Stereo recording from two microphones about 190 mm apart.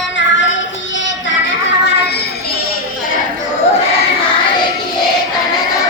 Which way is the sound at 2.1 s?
55° left (ahead or behind).